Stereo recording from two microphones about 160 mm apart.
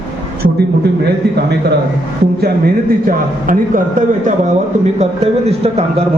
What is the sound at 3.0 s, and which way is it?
A man's voice, 60° right (ahead or behind).